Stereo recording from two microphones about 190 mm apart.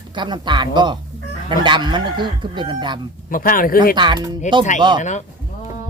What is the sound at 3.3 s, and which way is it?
Speech, 45° left (ahead or behind).